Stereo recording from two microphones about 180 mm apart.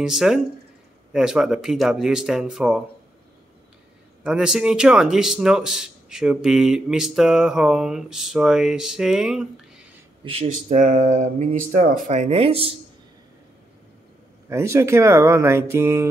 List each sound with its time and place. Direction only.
0.0 s speech: 5° right (ahead or behind)
4.2 s speech: 5° right (ahead or behind)
10.2 s speech: 30° right (ahead or behind)
10.7 s speech: 45° right (ahead or behind)
14.5 s speech: 15° right (ahead or behind)